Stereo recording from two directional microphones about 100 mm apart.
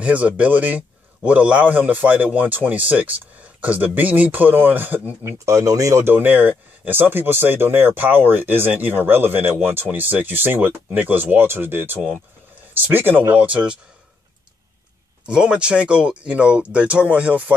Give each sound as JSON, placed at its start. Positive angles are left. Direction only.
{"t": 0.0, "sound": "a man's voice", "side_deg": -15}
{"t": 5.2, "sound": "a man's voice", "side_deg": -30}
{"t": 15.2, "sound": "a man's voice", "side_deg": -10}